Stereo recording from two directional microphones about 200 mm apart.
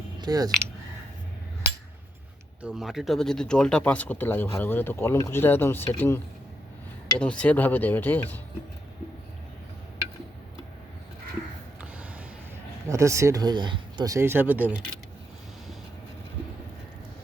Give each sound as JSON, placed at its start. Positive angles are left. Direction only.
{"t": 0.2, "sound": "speech", "side_deg": -20}
{"t": 2.6, "sound": "speech", "side_deg": -5}
{"t": 7.2, "sound": "speech", "side_deg": 5}
{"t": 12.9, "sound": "speech", "side_deg": -15}